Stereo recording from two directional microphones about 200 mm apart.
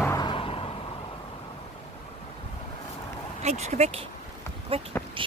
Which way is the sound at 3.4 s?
35° right (ahead or behind).